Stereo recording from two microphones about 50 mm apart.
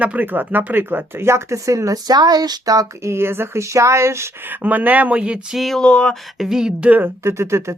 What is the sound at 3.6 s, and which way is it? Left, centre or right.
Speech, right.